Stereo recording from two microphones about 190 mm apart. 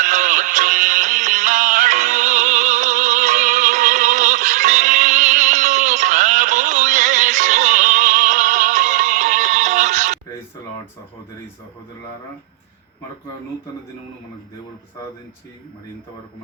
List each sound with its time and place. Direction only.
0.0 s music: 40° right (ahead or behind)